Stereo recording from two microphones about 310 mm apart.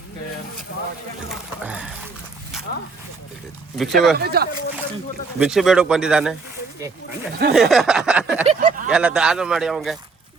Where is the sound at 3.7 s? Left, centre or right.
Centre.